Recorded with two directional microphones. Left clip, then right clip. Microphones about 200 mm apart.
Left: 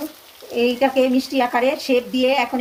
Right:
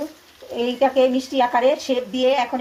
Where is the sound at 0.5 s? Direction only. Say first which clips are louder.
Left 1 dB; 5° left (ahead or behind).